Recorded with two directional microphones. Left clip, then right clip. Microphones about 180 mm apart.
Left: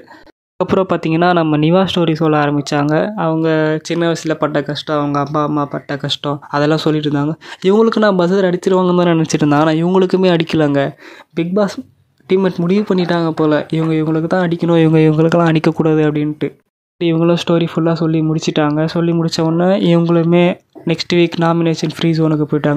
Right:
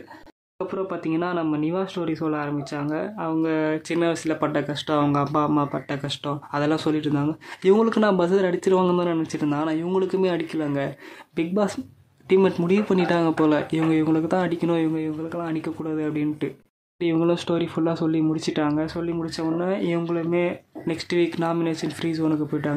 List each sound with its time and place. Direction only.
0.6 s speech: 60° left (ahead or behind); by 8.9 s 30° left (ahead or behind)
8.9 s speech: 45° left (ahead or behind)
11.3 s speech: 35° left (ahead or behind)
14.9 s speech: 65° left (ahead or behind); by 22.8 s 45° left (ahead or behind)